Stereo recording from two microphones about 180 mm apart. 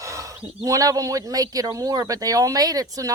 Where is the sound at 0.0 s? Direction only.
15° right (ahead or behind).